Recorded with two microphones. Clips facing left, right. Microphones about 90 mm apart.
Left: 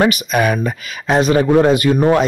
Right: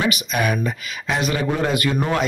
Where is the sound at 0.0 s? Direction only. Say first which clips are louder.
Left 7 dB; 45° left (ahead or behind).